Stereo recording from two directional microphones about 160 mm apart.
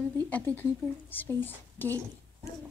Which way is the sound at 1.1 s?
10° left (ahead or behind).